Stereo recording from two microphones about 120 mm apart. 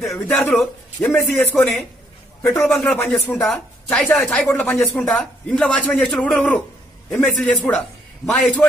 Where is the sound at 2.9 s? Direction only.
5° left (ahead or behind).